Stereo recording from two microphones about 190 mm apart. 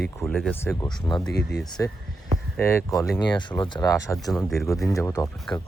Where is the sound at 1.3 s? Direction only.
60° left (ahead or behind).